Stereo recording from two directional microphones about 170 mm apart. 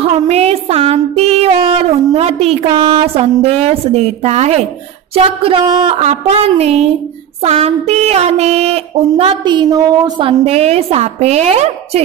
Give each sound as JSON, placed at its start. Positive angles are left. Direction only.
{"t": 0.0, "sound": "music", "side_deg": -35}
{"t": 3.6, "sound": "a woman's voice", "side_deg": -40}
{"t": 5.9, "sound": "a woman's voice", "side_deg": -40}